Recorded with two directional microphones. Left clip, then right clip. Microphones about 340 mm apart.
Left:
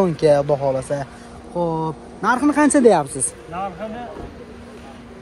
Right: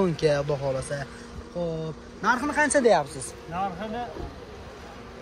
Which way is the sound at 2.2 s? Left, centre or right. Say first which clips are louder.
Left 6 dB; left.